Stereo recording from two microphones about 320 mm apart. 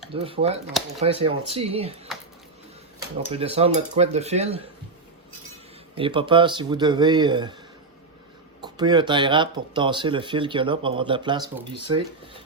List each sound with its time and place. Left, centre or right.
0.1 s speech: centre
3.2 s speech: centre
6.0 s speech: centre
8.6 s speech: centre